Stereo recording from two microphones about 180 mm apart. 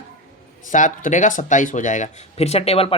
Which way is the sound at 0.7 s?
45° left (ahead or behind).